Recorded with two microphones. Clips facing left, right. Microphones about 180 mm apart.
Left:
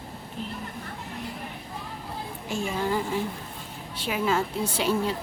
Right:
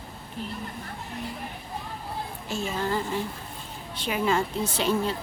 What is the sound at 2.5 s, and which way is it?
A woman's voice, 15° left (ahead or behind).